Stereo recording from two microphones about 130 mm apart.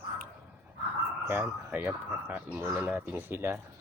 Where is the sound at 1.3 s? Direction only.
15° right (ahead or behind).